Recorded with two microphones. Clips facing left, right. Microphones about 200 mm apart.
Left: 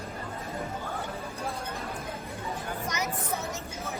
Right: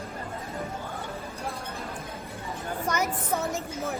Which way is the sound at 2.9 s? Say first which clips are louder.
Right 6 dB; 50° right (ahead or behind).